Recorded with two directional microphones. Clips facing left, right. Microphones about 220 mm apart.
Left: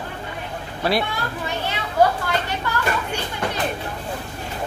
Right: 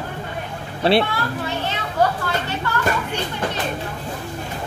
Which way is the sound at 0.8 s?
30° right (ahead or behind).